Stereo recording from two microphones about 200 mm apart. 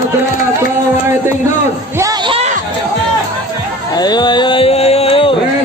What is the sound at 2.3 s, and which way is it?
Chatter, 35° right (ahead or behind).